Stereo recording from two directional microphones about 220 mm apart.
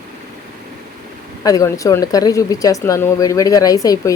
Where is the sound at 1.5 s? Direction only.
15° left (ahead or behind).